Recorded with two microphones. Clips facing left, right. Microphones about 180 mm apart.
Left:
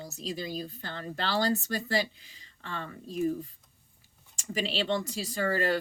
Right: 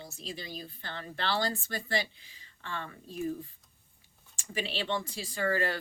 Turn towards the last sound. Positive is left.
turn(degrees=40)  # may be behind; listen again after turning